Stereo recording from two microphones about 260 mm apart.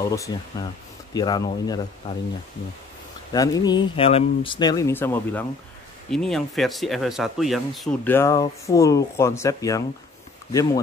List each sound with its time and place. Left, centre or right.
0.0 s speech: centre
3.3 s speech: centre